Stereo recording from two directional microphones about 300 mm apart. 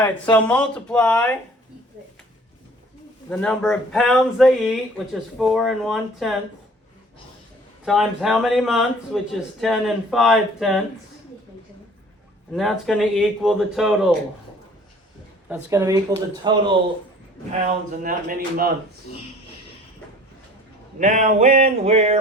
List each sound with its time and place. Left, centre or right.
0.0 s speech: centre
3.2 s speech: centre
7.9 s speech: centre
12.5 s speech: centre
15.4 s speech: centre
18.0 s a sound: right
21.0 s a sound: right